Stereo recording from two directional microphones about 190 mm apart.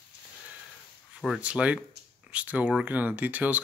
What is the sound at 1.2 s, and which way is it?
Speech, 5° right (ahead or behind).